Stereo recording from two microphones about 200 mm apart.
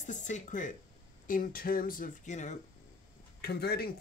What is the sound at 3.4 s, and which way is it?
Speech, 50° left (ahead or behind).